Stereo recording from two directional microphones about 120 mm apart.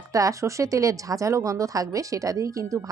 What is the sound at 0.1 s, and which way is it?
Speech, 25° right (ahead or behind).